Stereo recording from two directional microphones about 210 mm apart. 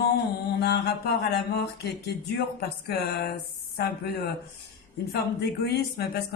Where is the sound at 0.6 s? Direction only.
50° left (ahead or behind).